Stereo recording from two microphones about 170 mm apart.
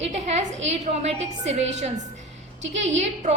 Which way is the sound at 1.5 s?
40° right (ahead or behind).